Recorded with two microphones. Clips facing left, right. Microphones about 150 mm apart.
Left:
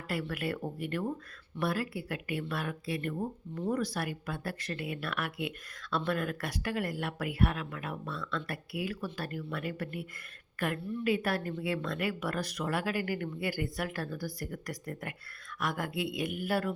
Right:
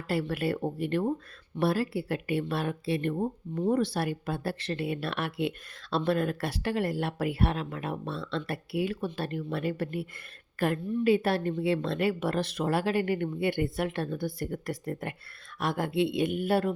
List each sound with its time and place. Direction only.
0.1 s a woman's voice: 30° right (ahead or behind)